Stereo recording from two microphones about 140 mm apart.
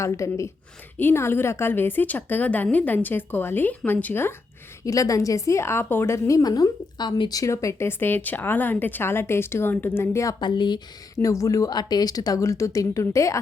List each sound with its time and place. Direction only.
0.0 s a woman's voice: 20° left (ahead or behind)
10.4 s a woman's voice: 35° left (ahead or behind)